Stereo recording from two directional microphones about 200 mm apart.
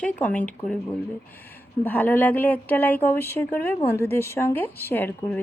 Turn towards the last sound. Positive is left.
turn(degrees=10)  # may be behind; listen again after turning